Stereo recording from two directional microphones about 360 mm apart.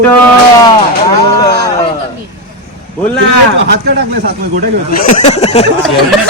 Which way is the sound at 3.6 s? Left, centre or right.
Right.